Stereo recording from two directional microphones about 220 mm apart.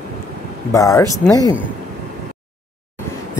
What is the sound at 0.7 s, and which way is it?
Speech, 15° left (ahead or behind).